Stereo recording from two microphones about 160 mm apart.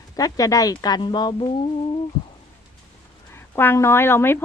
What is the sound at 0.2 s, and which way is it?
Speech, 20° left (ahead or behind).